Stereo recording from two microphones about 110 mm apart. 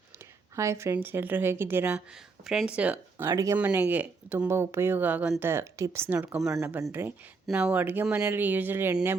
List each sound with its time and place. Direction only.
0.5 s a woman's voice: 25° right (ahead or behind)
2.5 s speech: 5° right (ahead or behind)
3.3 s a woman's voice: 30° right (ahead or behind)
3.6 s a woman's voice: 15° right (ahead or behind)